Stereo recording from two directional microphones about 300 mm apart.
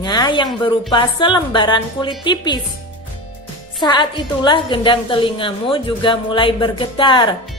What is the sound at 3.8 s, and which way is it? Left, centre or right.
A woman's voice, centre.